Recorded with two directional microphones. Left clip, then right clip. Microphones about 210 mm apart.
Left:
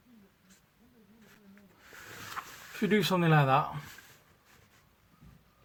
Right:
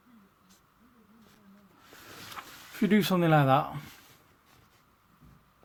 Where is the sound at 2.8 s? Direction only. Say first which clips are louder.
Right 1 dB; 40° right (ahead or behind).